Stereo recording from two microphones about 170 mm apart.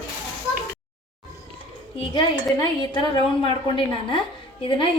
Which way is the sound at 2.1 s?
25° left (ahead or behind).